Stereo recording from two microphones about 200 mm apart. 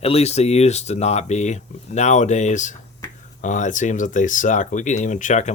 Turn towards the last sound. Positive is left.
turn(degrees=35)  # may be behind; listen again after turning